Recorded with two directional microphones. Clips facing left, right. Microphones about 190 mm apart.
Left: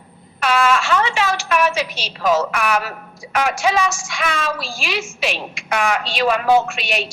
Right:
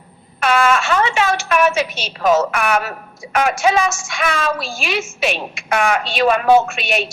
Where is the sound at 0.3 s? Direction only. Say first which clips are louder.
Right 2 dB; 50° right (ahead or behind).